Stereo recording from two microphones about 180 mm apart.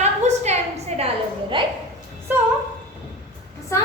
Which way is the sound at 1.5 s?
25° right (ahead or behind).